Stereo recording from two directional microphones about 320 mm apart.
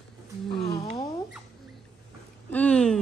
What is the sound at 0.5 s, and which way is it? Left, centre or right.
Speech, centre.